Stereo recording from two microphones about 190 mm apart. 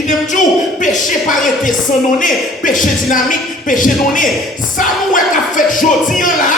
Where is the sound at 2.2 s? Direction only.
45° left (ahead or behind).